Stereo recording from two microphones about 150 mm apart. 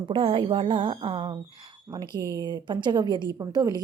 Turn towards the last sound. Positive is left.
turn(degrees=-25)  # may be behind; listen again after turning